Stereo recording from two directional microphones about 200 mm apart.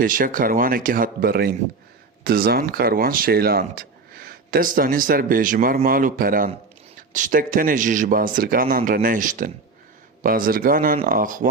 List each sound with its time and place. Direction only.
0.0 s speech: 45° right (ahead or behind)